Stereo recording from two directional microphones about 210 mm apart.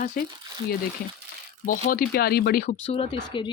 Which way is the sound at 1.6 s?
40° left (ahead or behind).